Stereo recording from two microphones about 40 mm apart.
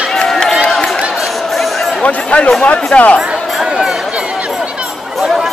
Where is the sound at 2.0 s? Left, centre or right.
Left.